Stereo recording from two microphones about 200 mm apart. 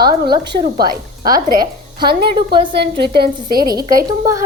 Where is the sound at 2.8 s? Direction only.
55° right (ahead or behind).